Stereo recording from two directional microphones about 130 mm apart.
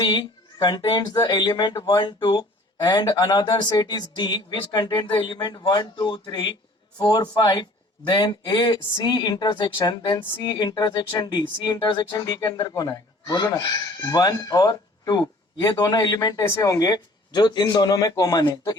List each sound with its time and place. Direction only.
0.0 s speech: 35° left (ahead or behind)